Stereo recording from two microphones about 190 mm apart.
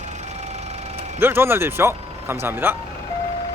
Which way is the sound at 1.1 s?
10° right (ahead or behind).